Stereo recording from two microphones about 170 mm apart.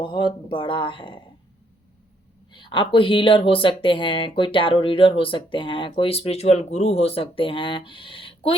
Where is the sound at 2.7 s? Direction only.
30° left (ahead or behind).